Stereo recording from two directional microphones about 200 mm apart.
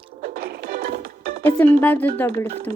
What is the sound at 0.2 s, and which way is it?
Music, 50° right (ahead or behind).